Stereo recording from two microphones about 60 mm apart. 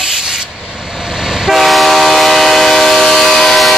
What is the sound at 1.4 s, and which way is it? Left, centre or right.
Train, centre.